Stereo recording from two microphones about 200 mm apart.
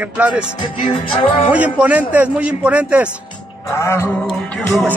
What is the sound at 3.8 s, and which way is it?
Music, 15° left (ahead or behind).